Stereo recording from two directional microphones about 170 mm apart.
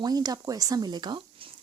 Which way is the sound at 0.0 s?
25° right (ahead or behind).